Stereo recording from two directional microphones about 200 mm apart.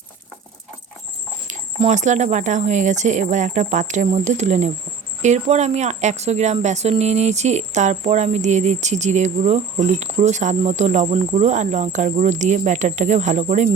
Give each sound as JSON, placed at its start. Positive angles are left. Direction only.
{"t": 1.5, "sound": "speech", "side_deg": -35}